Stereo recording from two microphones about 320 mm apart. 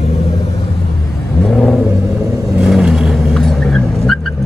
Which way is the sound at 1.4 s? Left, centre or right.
Centre.